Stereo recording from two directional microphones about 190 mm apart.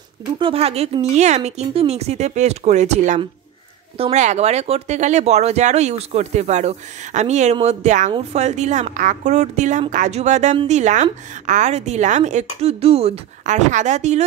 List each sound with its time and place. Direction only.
0.4 s a woman's voice: 30° right (ahead or behind)